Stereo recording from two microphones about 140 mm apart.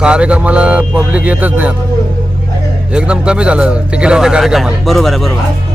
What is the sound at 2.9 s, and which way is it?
Speech, 5° right (ahead or behind).